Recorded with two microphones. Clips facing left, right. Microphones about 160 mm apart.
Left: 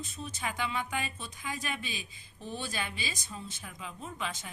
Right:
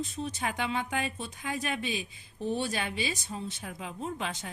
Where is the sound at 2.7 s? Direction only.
65° right (ahead or behind).